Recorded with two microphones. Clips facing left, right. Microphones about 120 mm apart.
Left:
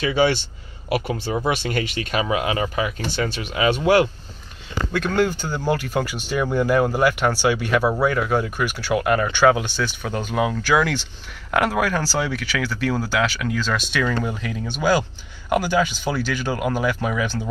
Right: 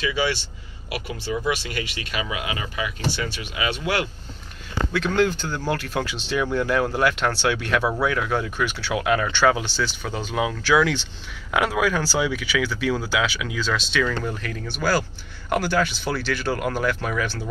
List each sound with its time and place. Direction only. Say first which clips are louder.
0.0 s speech: left 5 dB; 50° left (ahead or behind)
4.9 s speech: left 1 dB; 10° left (ahead or behind)
13.7 s speech: left 1 dB; 10° left (ahead or behind)